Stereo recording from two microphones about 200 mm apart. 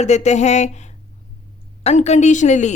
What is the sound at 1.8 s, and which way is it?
Speech, 35° left (ahead or behind).